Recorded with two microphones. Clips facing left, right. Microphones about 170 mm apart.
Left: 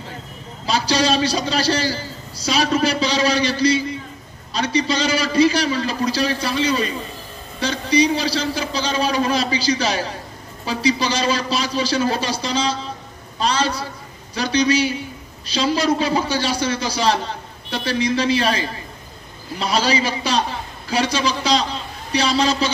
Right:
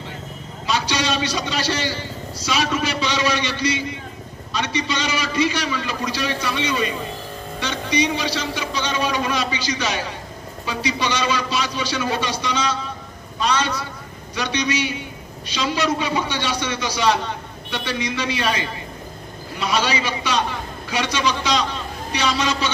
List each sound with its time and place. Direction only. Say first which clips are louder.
0.7 s a man's voice: left 4 dB; 35° left (ahead or behind)